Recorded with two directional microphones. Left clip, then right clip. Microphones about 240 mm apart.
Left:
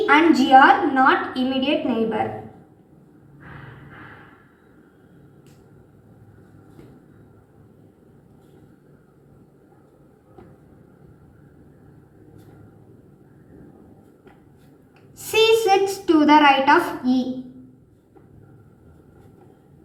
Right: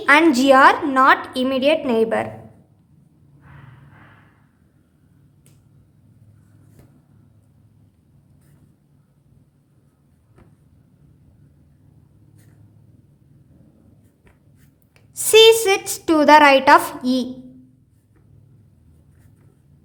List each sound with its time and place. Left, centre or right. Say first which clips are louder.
0.0 s a woman's voice: right 2 dB; right
15.2 s a woman's voice: right 6 dB; right